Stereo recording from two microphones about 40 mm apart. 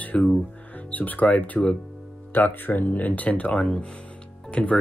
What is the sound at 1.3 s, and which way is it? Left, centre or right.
Speech, left.